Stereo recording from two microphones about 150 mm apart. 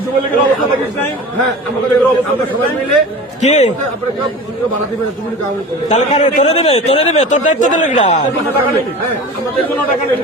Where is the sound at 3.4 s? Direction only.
50° left (ahead or behind).